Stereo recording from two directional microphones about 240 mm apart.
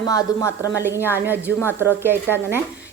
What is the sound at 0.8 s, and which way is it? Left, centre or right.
A woman's voice, centre.